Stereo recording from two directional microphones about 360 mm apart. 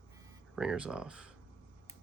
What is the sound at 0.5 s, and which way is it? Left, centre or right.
Speech, centre.